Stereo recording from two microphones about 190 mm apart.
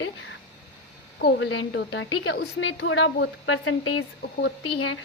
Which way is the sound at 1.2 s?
75° left (ahead or behind).